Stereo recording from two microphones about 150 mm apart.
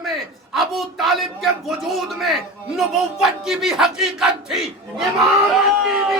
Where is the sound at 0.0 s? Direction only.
Centre (ahead or behind).